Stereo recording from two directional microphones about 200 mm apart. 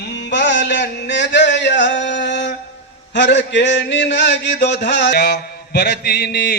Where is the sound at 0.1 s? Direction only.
60° left (ahead or behind).